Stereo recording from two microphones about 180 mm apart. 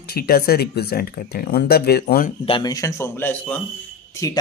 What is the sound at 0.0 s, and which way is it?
Speech, 60° left (ahead or behind).